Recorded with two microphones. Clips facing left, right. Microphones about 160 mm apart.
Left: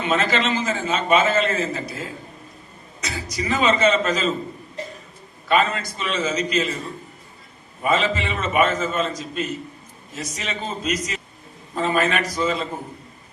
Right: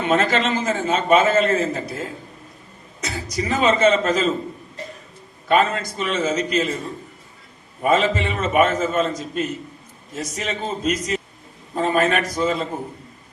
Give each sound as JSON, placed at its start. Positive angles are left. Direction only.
{"t": 0.1, "sound": "a man's voice", "side_deg": -50}
{"t": 3.0, "sound": "a man's voice", "side_deg": -50}
{"t": 5.5, "sound": "a man's voice", "side_deg": -50}
{"t": 7.8, "sound": "a man's voice", "side_deg": -50}